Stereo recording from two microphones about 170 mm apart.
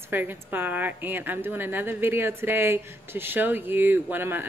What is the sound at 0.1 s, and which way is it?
A woman's voice, 10° right (ahead or behind).